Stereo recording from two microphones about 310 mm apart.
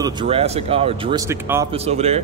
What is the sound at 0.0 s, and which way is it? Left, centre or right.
Speech, centre.